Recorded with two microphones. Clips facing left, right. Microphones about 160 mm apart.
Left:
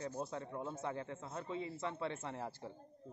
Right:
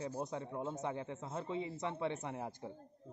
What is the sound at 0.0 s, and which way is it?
A man's voice, 15° right (ahead or behind).